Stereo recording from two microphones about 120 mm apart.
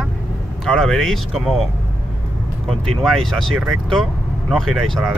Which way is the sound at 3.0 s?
Centre (ahead or behind).